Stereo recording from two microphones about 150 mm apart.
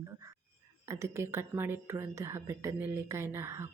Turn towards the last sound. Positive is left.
turn(degrees=-15)  # may be behind; listen again after turning